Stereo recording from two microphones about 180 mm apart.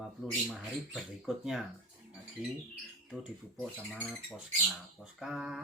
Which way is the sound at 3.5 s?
5° left (ahead or behind).